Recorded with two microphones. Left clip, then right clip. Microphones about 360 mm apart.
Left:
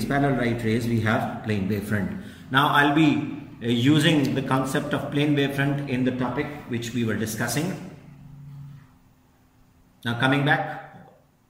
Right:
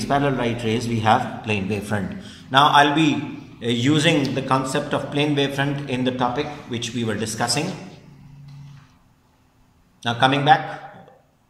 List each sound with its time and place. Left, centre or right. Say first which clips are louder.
0.1 s a man's voice: right 3 dB; centre
9.9 s a man's voice: right 5 dB; centre